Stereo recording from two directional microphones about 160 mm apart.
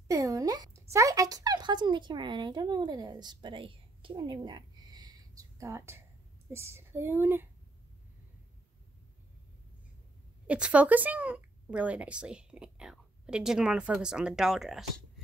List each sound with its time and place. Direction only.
0.1 s speech: 20° right (ahead or behind)
10.4 s speech: 10° right (ahead or behind)